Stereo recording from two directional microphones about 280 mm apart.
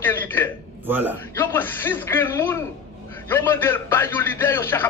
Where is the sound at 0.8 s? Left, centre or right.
Centre.